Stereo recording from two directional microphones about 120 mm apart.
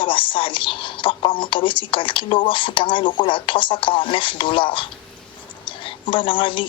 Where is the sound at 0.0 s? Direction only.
45° left (ahead or behind).